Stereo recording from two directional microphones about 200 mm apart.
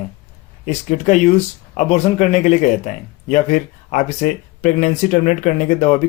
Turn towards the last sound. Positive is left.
turn(degrees=35)  # may be behind; listen again after turning